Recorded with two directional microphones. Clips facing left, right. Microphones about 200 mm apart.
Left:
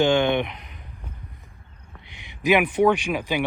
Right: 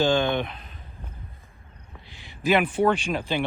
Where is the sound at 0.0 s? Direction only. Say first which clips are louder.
Left 3 dB; 20° left (ahead or behind).